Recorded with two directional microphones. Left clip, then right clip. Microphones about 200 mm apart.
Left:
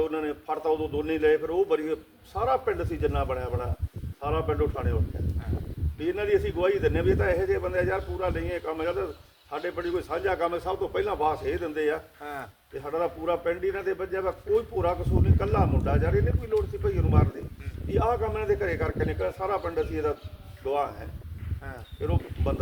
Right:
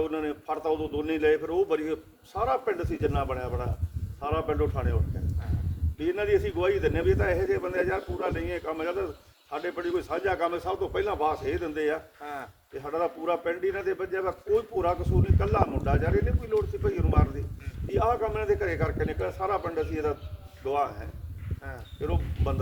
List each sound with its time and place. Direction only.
0.0 s a man's voice: 20° right (ahead or behind)
6.0 s a man's voice: 20° right (ahead or behind)
12.2 s a man's voice: 15° left (ahead or behind)
12.8 s a man's voice: 20° right (ahead or behind)
22.0 s a man's voice: 20° right (ahead or behind)